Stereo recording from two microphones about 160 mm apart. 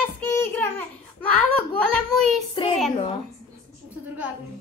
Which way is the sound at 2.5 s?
35° left (ahead or behind).